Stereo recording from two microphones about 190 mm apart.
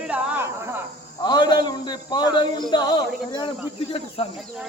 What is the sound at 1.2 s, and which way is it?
A man's voice, 20° left (ahead or behind).